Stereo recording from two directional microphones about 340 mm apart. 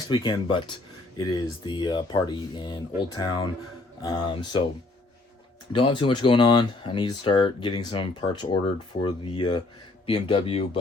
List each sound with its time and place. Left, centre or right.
0.1 s speech: centre
1.6 s speech: centre
5.7 s speech: centre